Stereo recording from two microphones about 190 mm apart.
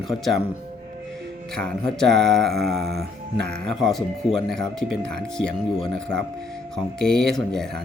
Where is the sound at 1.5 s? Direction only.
5° left (ahead or behind).